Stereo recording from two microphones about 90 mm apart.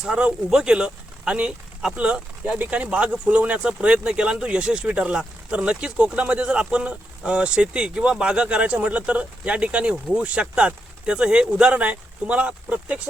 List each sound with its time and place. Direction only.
0.0 s speech: 10° right (ahead or behind)